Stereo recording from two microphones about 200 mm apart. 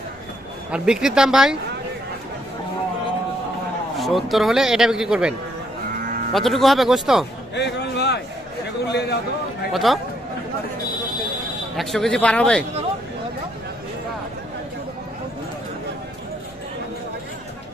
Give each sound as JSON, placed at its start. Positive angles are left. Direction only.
{"t": 0.7, "sound": "a man's voice", "side_deg": -5}
{"t": 3.9, "sound": "a man's voice", "side_deg": 0}
{"t": 6.3, "sound": "a man's voice", "side_deg": 0}
{"t": 7.5, "sound": "a sound", "side_deg": 60}
{"t": 8.9, "sound": "a man's voice", "side_deg": 55}
{"t": 9.7, "sound": "a man's voice", "side_deg": 0}
{"t": 11.7, "sound": "a man's voice", "side_deg": 0}